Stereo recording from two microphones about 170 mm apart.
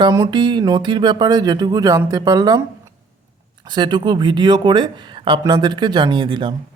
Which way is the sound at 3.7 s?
25° right (ahead or behind).